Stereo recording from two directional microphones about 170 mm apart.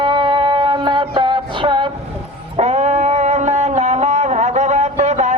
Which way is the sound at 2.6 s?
40° right (ahead or behind).